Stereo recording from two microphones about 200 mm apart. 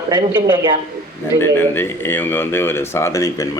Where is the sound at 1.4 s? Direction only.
10° left (ahead or behind).